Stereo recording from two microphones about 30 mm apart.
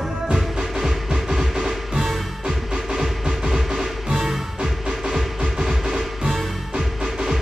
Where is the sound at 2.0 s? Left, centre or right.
Centre.